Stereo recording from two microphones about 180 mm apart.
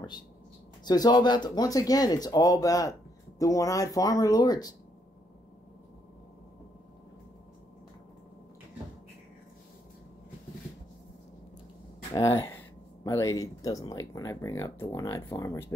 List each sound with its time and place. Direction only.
0.8 s speech: 20° left (ahead or behind)
12.1 s speech: 15° left (ahead or behind)